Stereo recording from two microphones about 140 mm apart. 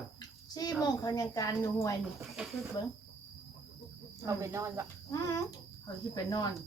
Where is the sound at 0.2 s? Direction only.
25° left (ahead or behind).